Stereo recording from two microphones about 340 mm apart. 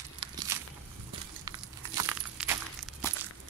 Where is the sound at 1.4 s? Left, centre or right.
Centre.